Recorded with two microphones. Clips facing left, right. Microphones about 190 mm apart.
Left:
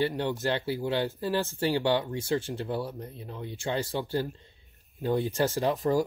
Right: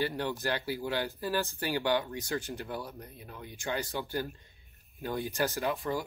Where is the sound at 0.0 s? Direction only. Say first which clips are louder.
Left 4 dB; 20° left (ahead or behind).